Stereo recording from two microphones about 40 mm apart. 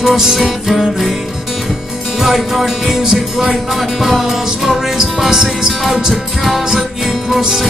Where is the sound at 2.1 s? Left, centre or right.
Centre.